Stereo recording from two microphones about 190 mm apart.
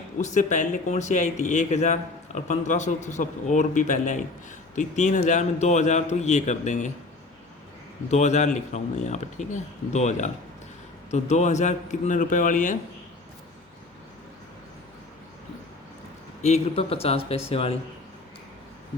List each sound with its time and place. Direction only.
0.2 s speech: 40° left (ahead or behind)
8.1 s speech: 40° left (ahead or behind)
16.4 s speech: 35° left (ahead or behind)